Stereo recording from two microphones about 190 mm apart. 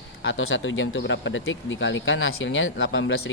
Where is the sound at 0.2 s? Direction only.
90° left.